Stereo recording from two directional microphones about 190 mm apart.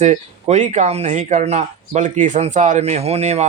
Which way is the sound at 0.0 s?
35° right (ahead or behind).